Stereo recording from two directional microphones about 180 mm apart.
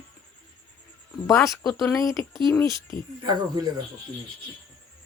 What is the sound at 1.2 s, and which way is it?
Speech, 20° left (ahead or behind).